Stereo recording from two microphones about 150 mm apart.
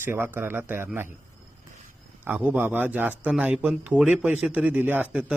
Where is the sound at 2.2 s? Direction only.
10° right (ahead or behind).